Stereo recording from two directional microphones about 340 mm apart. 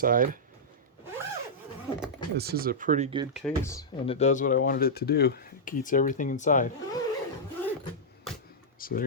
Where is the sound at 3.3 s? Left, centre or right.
Centre; by 6.7 s left.